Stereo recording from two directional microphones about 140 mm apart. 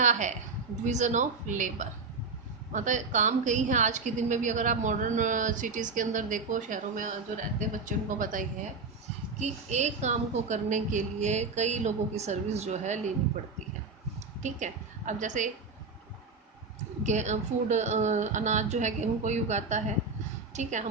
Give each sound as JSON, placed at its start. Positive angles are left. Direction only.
{"t": 0.0, "sound": "a sound", "side_deg": -60}
{"t": 0.9, "sound": "a woman's voice", "side_deg": -60}
{"t": 9.4, "sound": "a woman's voice", "side_deg": -55}
{"t": 14.4, "sound": "a woman's voice", "side_deg": -60}
{"t": 17.0, "sound": "a woman's voice", "side_deg": -55}